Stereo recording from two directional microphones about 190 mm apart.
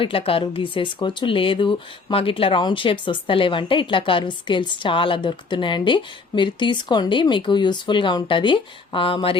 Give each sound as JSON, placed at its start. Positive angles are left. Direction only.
{"t": 0.0, "sound": "speech", "side_deg": 30}